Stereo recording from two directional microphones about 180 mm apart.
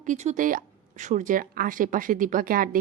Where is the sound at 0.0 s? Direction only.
40° right (ahead or behind).